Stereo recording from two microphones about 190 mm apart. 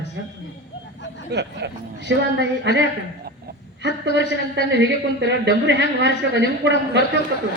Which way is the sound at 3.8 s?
70° right (ahead or behind).